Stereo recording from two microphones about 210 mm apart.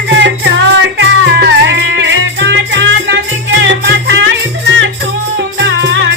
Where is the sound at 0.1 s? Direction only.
60° right (ahead or behind).